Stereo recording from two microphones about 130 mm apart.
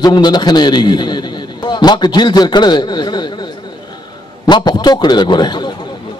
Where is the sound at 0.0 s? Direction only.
35° left (ahead or behind).